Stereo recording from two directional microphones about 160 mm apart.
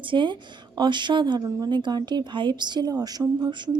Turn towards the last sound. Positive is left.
turn(degrees=-30)  # may be behind; listen again after turning